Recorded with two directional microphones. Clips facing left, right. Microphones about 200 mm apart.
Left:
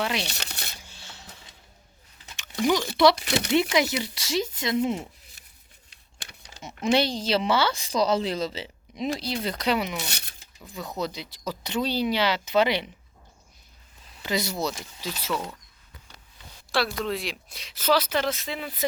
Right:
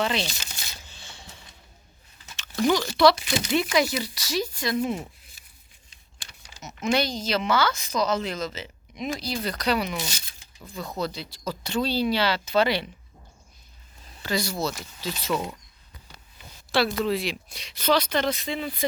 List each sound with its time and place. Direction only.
0.0 s speech: 10° left (ahead or behind)
0.3 s crumpling: 65° left (ahead or behind)
0.8 s a sound: 10° left (ahead or behind)
2.3 s a sound: 15° left (ahead or behind)
3.2 s speech: 65° left (ahead or behind)
3.5 s speech: 25° left (ahead or behind)
6.6 s speech: 30° left (ahead or behind)
10.1 s speech: 65° left (ahead or behind)
10.7 s speech: 20° left (ahead or behind)
14.2 s speech: 20° left (ahead or behind)
15.0 s speech: 5° left (ahead or behind)
16.7 s speech: centre (ahead or behind)